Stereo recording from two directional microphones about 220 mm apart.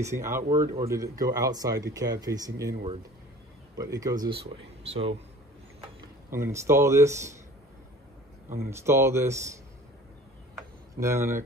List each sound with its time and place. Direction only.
0.0 s speech: 10° right (ahead or behind)
3.7 s speech: 15° right (ahead or behind)
6.3 s speech: 10° right (ahead or behind)
8.6 s speech: 10° right (ahead or behind)
11.0 s speech: 10° right (ahead or behind)